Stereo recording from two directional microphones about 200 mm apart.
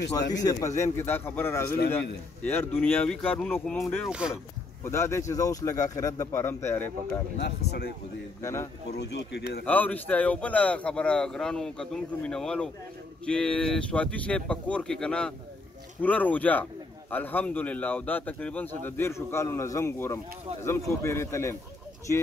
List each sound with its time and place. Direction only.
0.3 s speech: 15° left (ahead or behind); by 4.4 s 5° right (ahead or behind)
4.8 s speech: 15° left (ahead or behind)
7.3 s speech: 55° left (ahead or behind)
8.4 s speech: 15° left (ahead or behind)
8.9 s speech: 55° left (ahead or behind)
9.7 s speech: 10° left (ahead or behind)